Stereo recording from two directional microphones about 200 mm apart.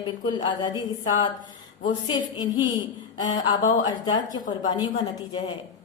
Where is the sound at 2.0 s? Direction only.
20° left (ahead or behind).